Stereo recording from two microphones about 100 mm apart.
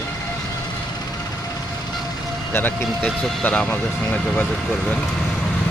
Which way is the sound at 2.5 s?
20° left (ahead or behind).